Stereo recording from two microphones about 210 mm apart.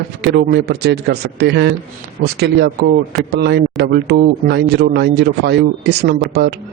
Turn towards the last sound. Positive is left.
turn(degrees=-50)  # may be behind; listen again after turning